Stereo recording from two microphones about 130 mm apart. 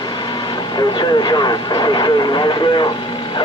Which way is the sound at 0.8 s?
35° left (ahead or behind).